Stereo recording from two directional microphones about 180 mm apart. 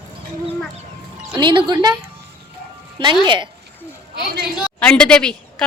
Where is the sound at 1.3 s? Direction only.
25° right (ahead or behind).